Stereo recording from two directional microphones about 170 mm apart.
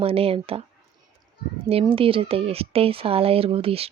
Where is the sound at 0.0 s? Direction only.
35° right (ahead or behind).